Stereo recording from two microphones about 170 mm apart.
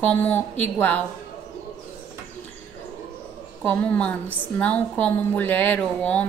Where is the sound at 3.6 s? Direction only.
10° left (ahead or behind).